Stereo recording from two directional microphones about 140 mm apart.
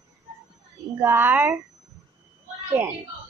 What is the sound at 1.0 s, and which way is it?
Speech, 15° right (ahead or behind).